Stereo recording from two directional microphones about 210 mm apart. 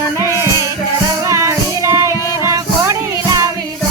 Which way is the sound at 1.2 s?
15° right (ahead or behind).